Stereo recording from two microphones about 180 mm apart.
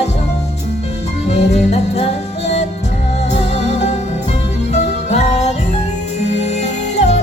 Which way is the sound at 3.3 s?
40° left (ahead or behind).